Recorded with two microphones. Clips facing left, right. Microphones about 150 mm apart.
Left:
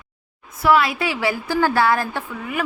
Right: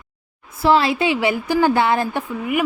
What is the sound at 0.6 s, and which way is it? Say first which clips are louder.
A woman's voice: right 2 dB; 30° right (ahead or behind).